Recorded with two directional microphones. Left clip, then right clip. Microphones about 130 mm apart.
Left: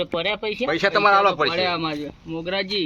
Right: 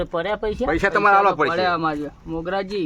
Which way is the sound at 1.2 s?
90° right.